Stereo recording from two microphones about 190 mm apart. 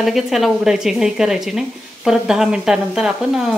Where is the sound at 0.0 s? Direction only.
Centre (ahead or behind).